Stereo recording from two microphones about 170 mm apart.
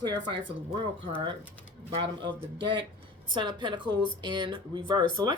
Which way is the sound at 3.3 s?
25° right (ahead or behind).